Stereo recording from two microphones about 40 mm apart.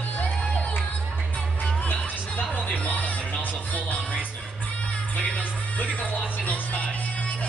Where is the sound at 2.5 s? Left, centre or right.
Left.